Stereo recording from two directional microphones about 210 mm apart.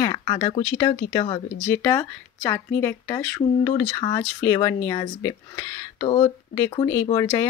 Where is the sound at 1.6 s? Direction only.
10° left (ahead or behind).